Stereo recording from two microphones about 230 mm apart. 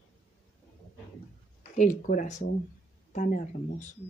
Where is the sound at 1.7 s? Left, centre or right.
Left.